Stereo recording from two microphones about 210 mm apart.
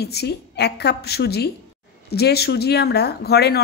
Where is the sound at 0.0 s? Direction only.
50° left (ahead or behind).